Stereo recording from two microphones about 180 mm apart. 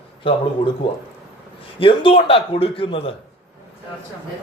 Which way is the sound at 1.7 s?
30° left (ahead or behind).